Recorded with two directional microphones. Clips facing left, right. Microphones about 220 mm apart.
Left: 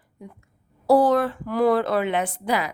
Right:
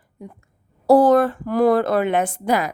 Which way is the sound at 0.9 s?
45° right (ahead or behind).